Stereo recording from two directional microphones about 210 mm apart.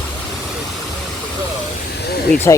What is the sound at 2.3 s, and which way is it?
Speech, 10° left (ahead or behind).